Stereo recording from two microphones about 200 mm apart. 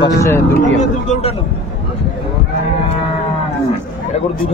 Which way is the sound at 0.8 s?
35° left (ahead or behind).